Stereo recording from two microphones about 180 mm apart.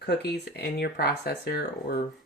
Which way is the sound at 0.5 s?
65° left (ahead or behind).